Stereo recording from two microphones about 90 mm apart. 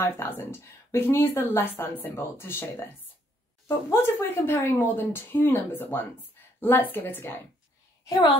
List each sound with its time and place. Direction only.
0.0 s speech: 25° left (ahead or behind)